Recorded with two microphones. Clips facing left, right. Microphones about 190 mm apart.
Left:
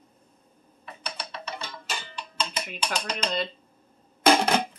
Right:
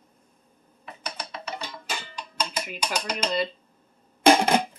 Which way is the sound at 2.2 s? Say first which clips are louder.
Right 1 dB; 10° right (ahead or behind).